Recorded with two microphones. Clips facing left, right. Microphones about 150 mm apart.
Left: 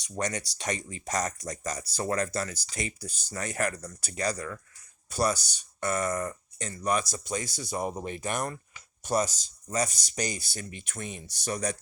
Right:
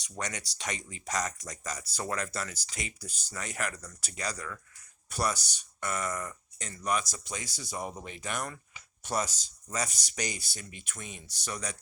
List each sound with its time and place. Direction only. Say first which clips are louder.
0.2 s speech: left 6 dB; 45° left (ahead or behind)
7.0 s speech: left 7 dB; 50° left (ahead or behind)